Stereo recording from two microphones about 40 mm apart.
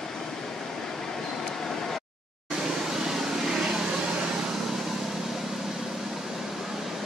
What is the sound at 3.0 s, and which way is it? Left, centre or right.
Vehicle, centre.